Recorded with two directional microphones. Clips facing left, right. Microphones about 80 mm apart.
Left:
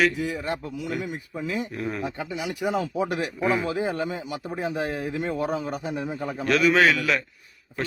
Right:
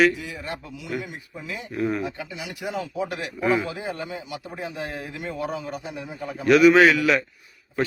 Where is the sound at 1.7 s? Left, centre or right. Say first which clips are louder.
Right 5 dB; centre.